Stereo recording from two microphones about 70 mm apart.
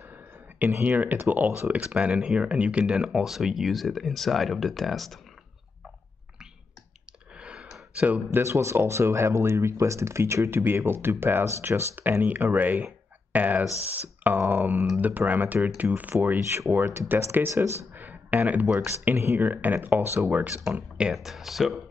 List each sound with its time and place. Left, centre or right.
0.6 s speech: right
0.8 s speech: right
1.8 s speech: centre
7.3 s a sound: centre
7.9 s speech: centre
8.3 s speech: right
16.3 s speech: right
17.9 s a sound: right
19.1 s speech: right
20.7 s speech: centre